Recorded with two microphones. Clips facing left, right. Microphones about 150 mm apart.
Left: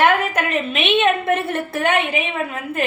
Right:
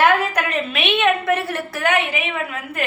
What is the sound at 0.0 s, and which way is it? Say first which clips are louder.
A woman's voice: even; 20° left (ahead or behind).